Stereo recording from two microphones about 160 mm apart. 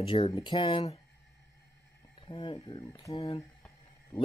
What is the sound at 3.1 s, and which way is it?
Speech, 35° left (ahead or behind).